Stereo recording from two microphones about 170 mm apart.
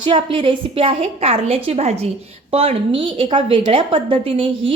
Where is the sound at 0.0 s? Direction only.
30° right (ahead or behind).